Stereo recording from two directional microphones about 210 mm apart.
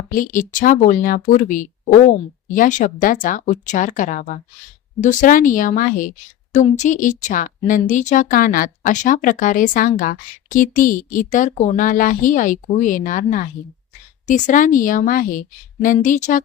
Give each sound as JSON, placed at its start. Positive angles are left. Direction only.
{"t": 0.1, "sound": "speech", "side_deg": 40}